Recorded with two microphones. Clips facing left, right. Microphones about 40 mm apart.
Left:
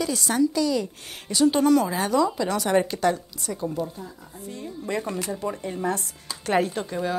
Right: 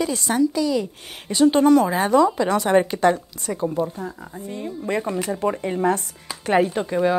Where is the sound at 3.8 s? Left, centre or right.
Right.